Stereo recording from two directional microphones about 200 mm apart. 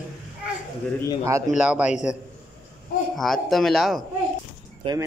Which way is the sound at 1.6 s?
5° right (ahead or behind).